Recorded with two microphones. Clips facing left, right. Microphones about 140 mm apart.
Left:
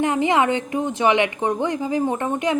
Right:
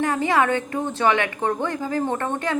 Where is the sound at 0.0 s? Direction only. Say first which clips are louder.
Left 2 dB; 20° left (ahead or behind).